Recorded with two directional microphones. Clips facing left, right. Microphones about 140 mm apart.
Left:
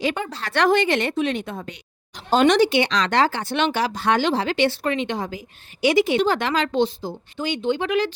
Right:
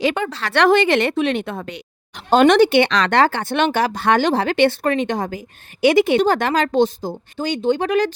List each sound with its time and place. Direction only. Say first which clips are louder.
0.0 s speech: right 5 dB; 80° right; by 8.1 s 45° right (ahead or behind)